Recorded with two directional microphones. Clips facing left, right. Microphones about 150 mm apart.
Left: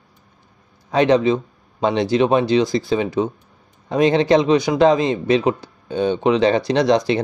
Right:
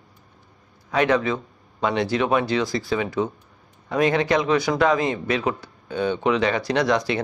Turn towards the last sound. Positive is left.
turn(degrees=25)  # may be behind; listen again after turning